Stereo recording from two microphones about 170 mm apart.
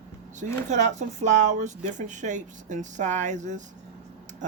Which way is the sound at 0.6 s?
45° right (ahead or behind).